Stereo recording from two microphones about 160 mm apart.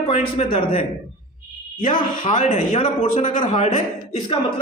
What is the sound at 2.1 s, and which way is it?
A man's voice, 55° left (ahead or behind).